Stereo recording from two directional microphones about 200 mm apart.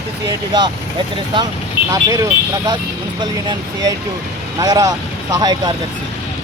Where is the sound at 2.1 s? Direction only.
20° right (ahead or behind).